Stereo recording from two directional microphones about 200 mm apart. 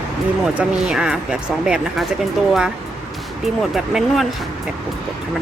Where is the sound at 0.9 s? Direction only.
5° right (ahead or behind).